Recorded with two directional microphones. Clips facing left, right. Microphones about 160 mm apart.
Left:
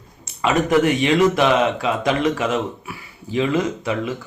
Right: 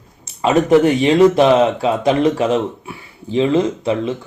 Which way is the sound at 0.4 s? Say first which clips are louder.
Right 5 dB; 30° right (ahead or behind).